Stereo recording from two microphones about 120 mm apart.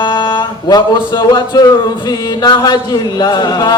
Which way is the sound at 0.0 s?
40° left (ahead or behind).